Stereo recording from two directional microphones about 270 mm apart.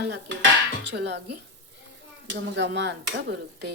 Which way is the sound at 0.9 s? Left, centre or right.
Right.